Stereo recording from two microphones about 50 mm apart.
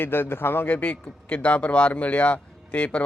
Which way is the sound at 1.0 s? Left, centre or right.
Left.